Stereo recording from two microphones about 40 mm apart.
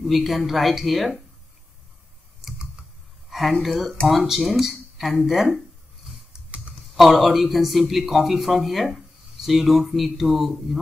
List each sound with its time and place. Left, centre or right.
0.0 s speech: centre
3.3 s a sound: centre
3.6 s speech: centre
6.5 s typing: right
7.0 s speech: centre